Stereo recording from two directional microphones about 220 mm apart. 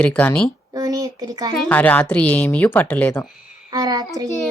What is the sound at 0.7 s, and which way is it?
Speech, 15° right (ahead or behind).